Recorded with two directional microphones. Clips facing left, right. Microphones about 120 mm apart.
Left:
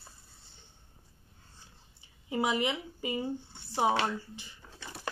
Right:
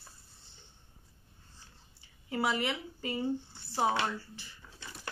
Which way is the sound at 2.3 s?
20° left (ahead or behind).